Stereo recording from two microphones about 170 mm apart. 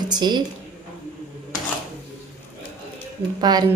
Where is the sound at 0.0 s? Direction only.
25° right (ahead or behind).